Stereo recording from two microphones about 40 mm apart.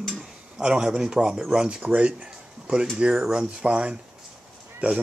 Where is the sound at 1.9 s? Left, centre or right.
Right.